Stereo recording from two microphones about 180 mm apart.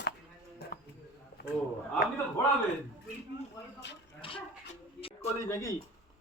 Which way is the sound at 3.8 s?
75° left (ahead or behind).